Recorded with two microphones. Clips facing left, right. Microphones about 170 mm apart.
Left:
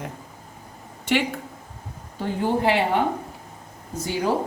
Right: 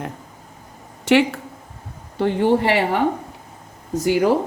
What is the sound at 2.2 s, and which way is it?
Speech, 75° right (ahead or behind).